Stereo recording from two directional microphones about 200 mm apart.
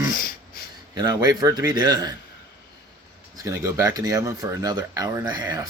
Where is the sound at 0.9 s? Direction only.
20° right (ahead or behind).